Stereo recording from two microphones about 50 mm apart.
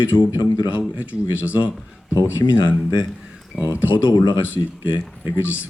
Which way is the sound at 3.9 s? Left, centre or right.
Left.